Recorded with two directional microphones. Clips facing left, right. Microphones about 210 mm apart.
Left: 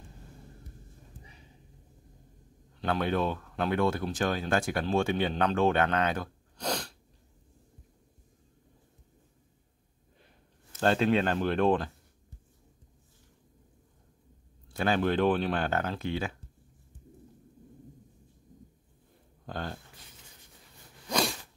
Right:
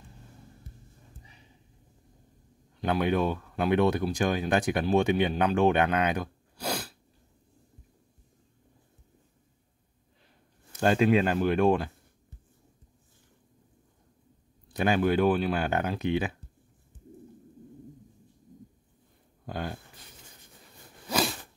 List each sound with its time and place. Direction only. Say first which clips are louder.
2.8 s speech: right 3 dB; 15° right (ahead or behind)
10.7 s speech: right 3 dB; 10° right (ahead or behind)
14.7 s a sound: right 2 dB; 15° right (ahead or behind)
15.0 s speech: right 2 dB; 10° right (ahead or behind)
19.4 s speech: right 2 dB; 10° right (ahead or behind)
21.1 s a sound: right 1 dB; 5° right (ahead or behind)